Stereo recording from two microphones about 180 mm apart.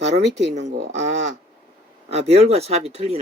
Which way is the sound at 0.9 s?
40° right (ahead or behind).